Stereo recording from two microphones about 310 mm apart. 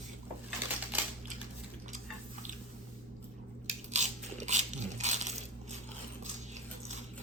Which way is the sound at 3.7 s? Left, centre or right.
Right.